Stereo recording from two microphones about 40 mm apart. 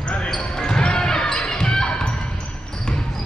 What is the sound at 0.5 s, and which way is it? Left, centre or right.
Basketball bounce, left.